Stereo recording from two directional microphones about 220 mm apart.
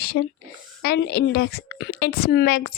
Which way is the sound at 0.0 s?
45° left (ahead or behind).